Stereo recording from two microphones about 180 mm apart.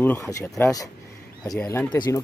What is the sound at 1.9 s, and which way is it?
Speech, 25° left (ahead or behind).